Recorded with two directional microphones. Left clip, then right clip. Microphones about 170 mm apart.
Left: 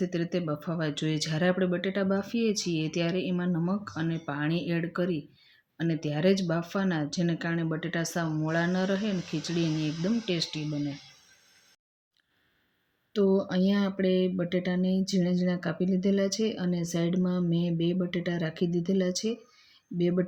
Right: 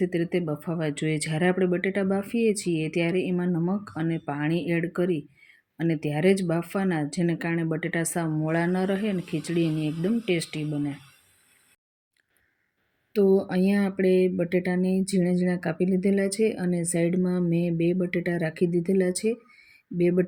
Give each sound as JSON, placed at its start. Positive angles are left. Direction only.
{"t": 0.1, "sound": "speech", "side_deg": -15}
{"t": 13.1, "sound": "speech", "side_deg": -15}